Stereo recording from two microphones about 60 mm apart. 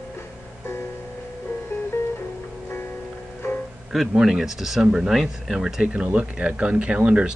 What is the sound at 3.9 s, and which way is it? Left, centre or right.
Speech, centre.